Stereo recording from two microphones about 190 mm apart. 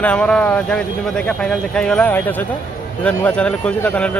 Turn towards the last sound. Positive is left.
turn(degrees=5)  # may be behind; listen again after turning